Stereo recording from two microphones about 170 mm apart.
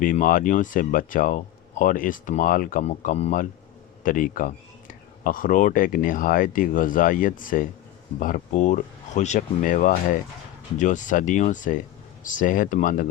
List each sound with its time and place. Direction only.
0.0 s speech: 55° left (ahead or behind)
4.0 s speech: 55° left (ahead or behind)